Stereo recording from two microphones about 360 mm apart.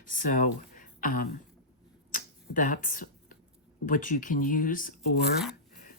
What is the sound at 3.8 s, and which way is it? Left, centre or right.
Speech, left.